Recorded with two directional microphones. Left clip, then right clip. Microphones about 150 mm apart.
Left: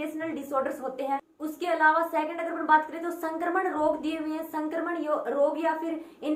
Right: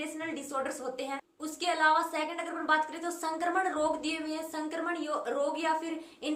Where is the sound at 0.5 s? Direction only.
15° right (ahead or behind).